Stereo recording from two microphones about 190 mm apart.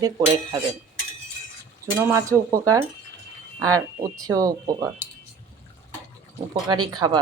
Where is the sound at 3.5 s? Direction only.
20° right (ahead or behind).